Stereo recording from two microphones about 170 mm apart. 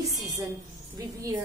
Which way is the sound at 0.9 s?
20° right (ahead or behind).